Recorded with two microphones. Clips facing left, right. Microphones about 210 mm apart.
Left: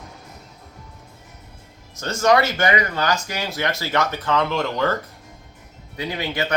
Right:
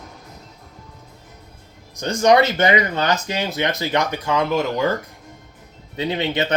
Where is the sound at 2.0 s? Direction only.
15° right (ahead or behind).